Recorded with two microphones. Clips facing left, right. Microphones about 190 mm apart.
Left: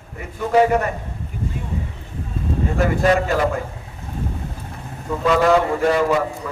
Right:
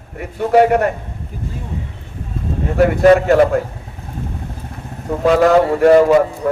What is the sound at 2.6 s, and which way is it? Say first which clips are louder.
Speech: right 8 dB; 60° right (ahead or behind).